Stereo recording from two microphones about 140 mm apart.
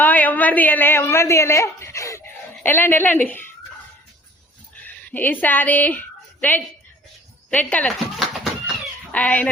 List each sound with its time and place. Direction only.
0.0 s a man's voice: 10° left (ahead or behind)
4.8 s a woman's voice: 15° left (ahead or behind)